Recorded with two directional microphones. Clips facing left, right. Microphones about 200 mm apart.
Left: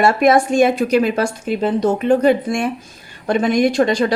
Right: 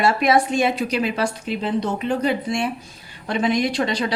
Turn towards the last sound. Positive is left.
turn(degrees=50)  # may be behind; listen again after turning